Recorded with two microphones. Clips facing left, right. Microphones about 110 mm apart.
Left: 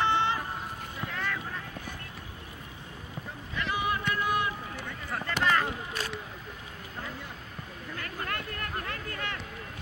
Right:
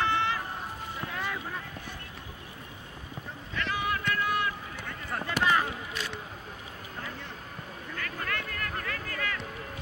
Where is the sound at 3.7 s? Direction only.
20° left (ahead or behind).